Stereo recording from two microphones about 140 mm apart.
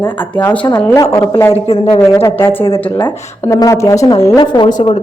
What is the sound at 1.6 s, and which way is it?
Speech, 45° left (ahead or behind).